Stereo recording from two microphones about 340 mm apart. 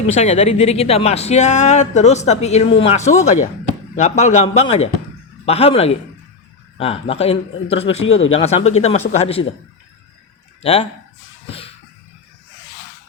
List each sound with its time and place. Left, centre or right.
0.1 s a man's voice: centre
8.0 s speech: left
8.3 s a man's voice: centre
10.6 s speech: centre